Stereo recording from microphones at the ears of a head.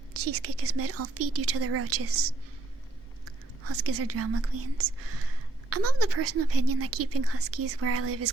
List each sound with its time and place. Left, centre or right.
0.1 s speech: right